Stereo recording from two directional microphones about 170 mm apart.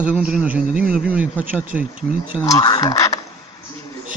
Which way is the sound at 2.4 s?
20° left (ahead or behind).